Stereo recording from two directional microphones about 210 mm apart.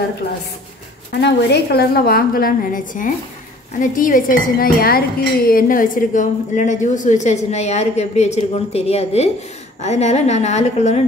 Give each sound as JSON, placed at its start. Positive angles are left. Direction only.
{"t": 1.2, "sound": "a woman's voice", "side_deg": 50}
{"t": 3.8, "sound": "dishes", "side_deg": 40}